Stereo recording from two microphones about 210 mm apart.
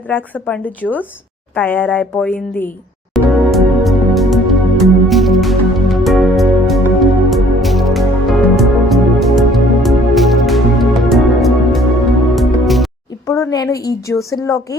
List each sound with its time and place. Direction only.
0.1 s speech: 10° left (ahead or behind)
3.1 s music: centre (ahead or behind)
13.2 s a woman's voice: 15° left (ahead or behind)